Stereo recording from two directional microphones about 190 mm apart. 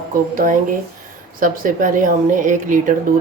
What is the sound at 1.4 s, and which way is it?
A woman's voice, 45° right (ahead or behind).